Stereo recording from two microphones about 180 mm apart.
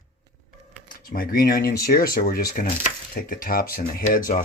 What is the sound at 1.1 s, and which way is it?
Speech, 55° left (ahead or behind).